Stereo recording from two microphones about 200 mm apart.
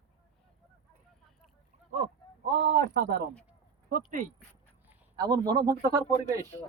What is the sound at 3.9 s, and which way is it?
Speech, 40° right (ahead or behind).